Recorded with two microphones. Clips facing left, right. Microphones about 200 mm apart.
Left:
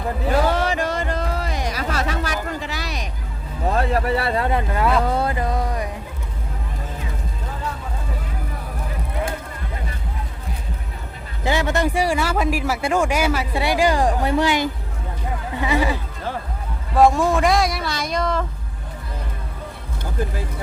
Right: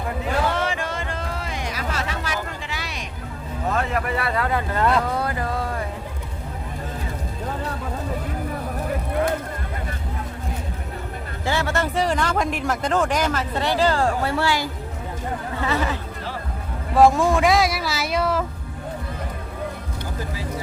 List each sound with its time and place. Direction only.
0.4 s music: 40° left (ahead or behind)
3.7 s vehicle: 35° left (ahead or behind)
4.7 s speech: 10° left (ahead or behind)
5.1 s music: 25° left (ahead or behind)
11.4 s speech: 15° left (ahead or behind)
15.5 s a sound: 15° left (ahead or behind)
16.9 s speech: centre (ahead or behind)